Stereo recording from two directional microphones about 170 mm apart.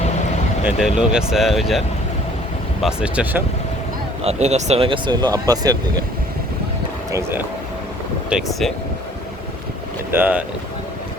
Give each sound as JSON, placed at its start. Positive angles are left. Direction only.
{"t": 0.6, "sound": "speech", "side_deg": -5}
{"t": 2.8, "sound": "speech", "side_deg": -5}
{"t": 4.2, "sound": "speech", "side_deg": -40}
{"t": 7.1, "sound": "speech", "side_deg": -15}
{"t": 8.3, "sound": "speech", "side_deg": 0}
{"t": 10.1, "sound": "speech", "side_deg": -10}